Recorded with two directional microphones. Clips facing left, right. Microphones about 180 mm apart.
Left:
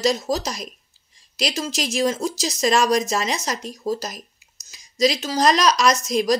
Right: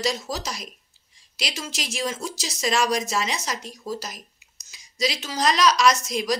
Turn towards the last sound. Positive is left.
turn(degrees=40)  # may be behind; listen again after turning